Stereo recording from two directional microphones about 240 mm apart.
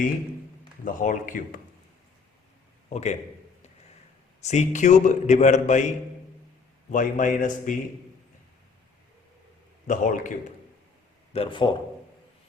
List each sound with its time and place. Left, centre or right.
0.9 s a man's voice: left
2.9 s a man's voice: left
4.4 s a man's voice: left
6.9 s a man's voice: left
9.8 s a man's voice: left
11.3 s a man's voice: left